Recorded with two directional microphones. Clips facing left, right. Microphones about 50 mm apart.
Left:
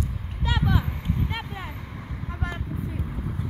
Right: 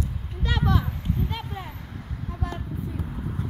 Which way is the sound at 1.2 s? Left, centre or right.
Left.